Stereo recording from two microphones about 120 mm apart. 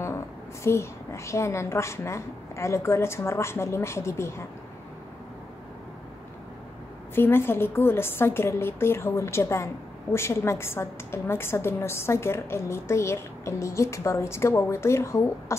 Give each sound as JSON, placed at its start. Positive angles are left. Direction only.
{"t": 0.7, "sound": "a woman's voice", "side_deg": 25}
{"t": 7.2, "sound": "a woman's voice", "side_deg": 20}